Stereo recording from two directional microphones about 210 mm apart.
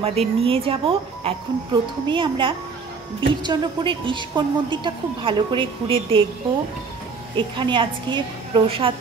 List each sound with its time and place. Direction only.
0.0 s speech: 30° right (ahead or behind)
7.3 s speech: 20° right (ahead or behind)